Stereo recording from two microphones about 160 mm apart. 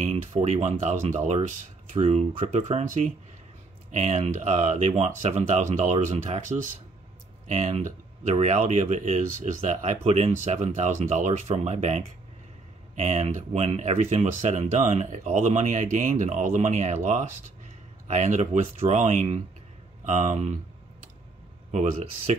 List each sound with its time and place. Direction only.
0.0 s speech: 45° right (ahead or behind)
21.7 s speech: 45° right (ahead or behind)